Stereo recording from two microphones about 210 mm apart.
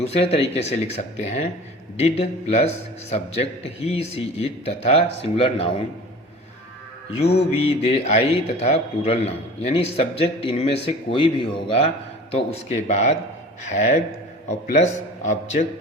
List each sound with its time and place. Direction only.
0.1 s a man's voice: 30° left (ahead or behind)
7.3 s a man's voice: 30° left (ahead or behind)